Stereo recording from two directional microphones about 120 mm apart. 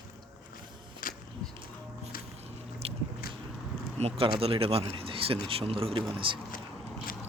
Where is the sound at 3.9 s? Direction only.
55° right (ahead or behind).